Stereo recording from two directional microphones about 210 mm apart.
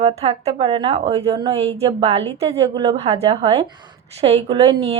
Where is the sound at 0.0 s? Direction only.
30° right (ahead or behind).